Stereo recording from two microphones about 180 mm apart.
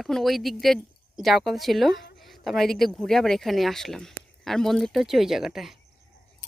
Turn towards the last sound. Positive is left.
turn(degrees=0)  # may be behind; listen again after turning